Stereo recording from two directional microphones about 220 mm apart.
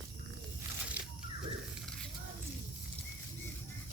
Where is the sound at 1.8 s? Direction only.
5° left (ahead or behind).